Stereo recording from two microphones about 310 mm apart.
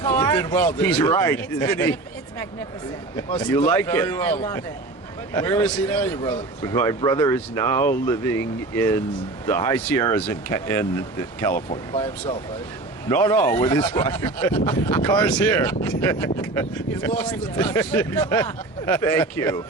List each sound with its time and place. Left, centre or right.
0.1 s speech: centre
3.2 s a man's voice: centre
13.1 s a man's voice: centre